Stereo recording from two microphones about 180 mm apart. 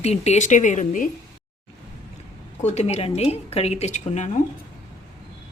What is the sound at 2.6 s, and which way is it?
A woman's voice, 40° left (ahead or behind).